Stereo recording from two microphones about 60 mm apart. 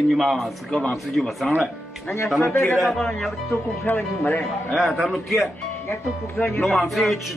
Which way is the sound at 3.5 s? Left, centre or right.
Left.